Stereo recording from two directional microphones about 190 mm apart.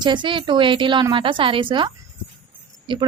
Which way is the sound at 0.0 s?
25° right (ahead or behind).